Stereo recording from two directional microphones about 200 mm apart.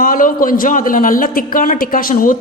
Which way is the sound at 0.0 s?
45° left (ahead or behind).